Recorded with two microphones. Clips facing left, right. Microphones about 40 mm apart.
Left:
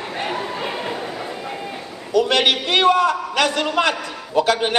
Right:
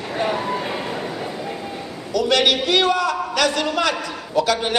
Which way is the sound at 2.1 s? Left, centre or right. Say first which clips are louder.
Left 1 dB; left.